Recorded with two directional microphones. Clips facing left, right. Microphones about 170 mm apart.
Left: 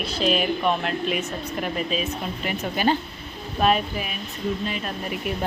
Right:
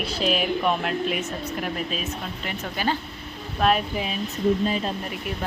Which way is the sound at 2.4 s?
20° left (ahead or behind).